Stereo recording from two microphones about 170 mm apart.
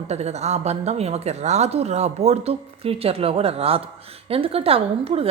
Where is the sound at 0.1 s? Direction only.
40° right (ahead or behind).